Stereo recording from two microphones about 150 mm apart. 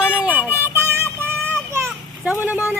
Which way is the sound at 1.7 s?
20° right (ahead or behind).